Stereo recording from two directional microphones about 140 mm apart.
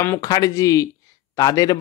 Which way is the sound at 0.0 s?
20° left (ahead or behind).